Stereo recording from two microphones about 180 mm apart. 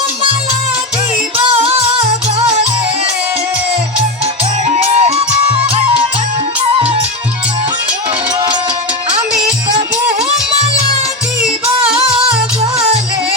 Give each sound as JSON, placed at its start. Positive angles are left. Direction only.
{"t": 4.8, "sound": "music", "side_deg": -35}
{"t": 11.9, "sound": "music", "side_deg": -5}